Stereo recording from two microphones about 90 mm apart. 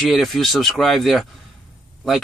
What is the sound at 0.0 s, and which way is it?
Speech, centre (ahead or behind).